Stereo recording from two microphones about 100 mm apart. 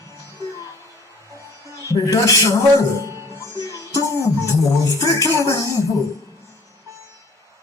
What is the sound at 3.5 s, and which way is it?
Music, 30° left (ahead or behind).